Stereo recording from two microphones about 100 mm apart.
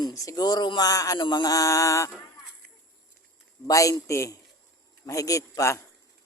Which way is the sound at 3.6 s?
35° left (ahead or behind).